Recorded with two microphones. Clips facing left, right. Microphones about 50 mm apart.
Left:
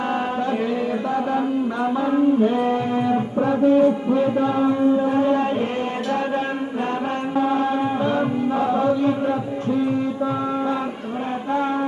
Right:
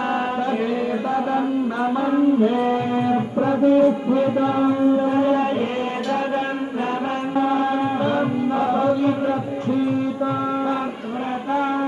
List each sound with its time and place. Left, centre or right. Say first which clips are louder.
1.1 s music: right 1 dB; right
4.1 s chant: even; right
7.3 s chant: even; right